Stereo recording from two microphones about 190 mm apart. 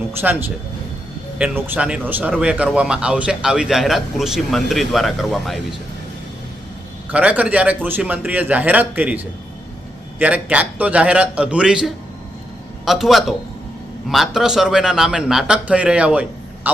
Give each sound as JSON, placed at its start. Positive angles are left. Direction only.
{"t": 0.2, "sound": "a man's voice", "side_deg": -10}
{"t": 7.1, "sound": "a man's voice", "side_deg": -5}